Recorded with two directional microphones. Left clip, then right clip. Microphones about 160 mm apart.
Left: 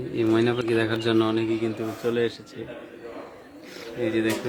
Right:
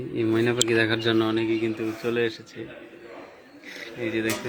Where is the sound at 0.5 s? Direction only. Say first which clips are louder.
Right 2 dB; 20° right (ahead or behind).